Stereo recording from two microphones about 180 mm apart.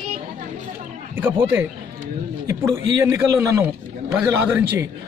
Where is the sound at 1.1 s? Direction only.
10° right (ahead or behind).